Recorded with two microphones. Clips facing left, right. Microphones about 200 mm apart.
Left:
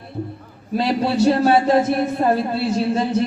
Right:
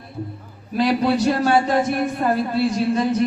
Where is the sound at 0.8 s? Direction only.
30° left (ahead or behind).